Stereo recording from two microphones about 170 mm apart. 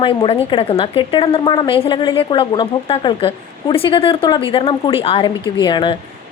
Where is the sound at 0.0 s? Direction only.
30° left (ahead or behind).